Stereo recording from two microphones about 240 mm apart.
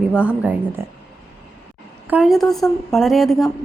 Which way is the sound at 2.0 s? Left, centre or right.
Centre.